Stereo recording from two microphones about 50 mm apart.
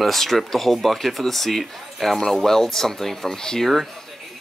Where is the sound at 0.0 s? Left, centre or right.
Centre.